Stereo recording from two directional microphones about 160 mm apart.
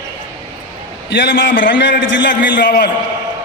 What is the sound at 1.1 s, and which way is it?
Speech, 90° left.